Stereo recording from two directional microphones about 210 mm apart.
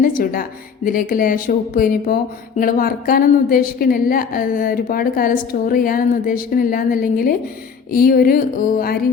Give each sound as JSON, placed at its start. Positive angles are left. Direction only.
{"t": 0.0, "sound": "speech", "side_deg": 40}